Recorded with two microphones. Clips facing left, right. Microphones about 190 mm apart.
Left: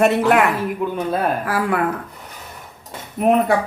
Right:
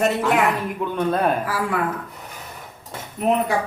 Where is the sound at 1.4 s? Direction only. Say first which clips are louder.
Left 4 dB; 60° left (ahead or behind).